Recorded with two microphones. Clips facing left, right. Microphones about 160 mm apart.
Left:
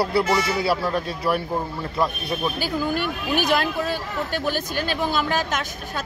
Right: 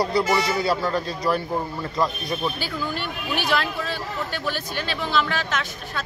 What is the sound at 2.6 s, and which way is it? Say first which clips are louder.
Speech: left 5 dB; 45° left (ahead or behind).